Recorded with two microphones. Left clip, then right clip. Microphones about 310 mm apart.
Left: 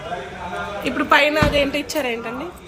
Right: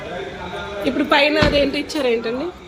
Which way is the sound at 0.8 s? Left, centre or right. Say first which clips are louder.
Even; centre.